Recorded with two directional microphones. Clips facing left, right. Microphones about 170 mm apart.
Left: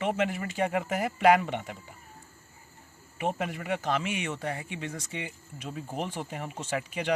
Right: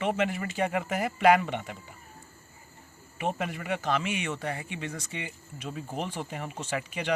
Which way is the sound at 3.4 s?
40° left (ahead or behind).